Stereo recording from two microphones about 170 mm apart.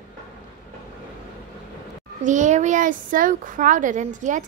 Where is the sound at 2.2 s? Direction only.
45° right (ahead or behind).